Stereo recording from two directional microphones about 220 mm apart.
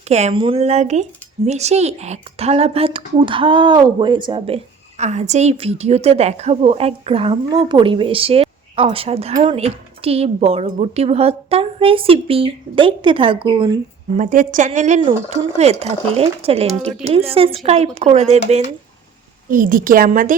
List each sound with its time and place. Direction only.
0.1 s speech: 30° right (ahead or behind)
14.2 s speech: 35° right (ahead or behind)
19.5 s speech: 40° right (ahead or behind)